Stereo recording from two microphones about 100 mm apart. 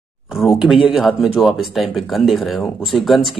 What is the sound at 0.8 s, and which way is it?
A man's voice, 5° right (ahead or behind).